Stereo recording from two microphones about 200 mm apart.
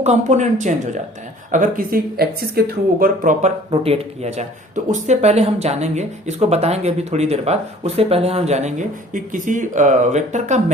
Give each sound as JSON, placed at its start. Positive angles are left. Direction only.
{"t": 0.0, "sound": "speech", "side_deg": -35}
{"t": 3.7, "sound": "speech", "side_deg": -30}